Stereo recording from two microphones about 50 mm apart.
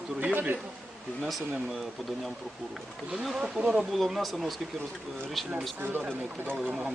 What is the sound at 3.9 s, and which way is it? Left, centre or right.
Speech, centre.